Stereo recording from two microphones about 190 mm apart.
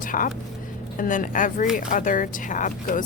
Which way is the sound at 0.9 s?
45° left (ahead or behind).